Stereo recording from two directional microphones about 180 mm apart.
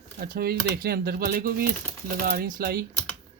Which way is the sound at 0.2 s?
55° right (ahead or behind).